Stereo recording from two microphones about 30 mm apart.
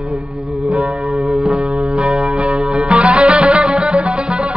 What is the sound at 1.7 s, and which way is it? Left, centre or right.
Music, right.